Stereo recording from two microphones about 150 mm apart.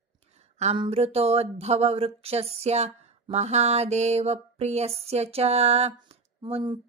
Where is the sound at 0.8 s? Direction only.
40° right (ahead or behind).